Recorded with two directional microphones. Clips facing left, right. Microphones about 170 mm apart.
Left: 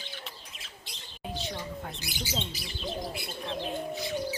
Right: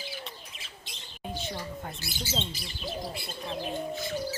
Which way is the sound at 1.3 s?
Centre (ahead or behind).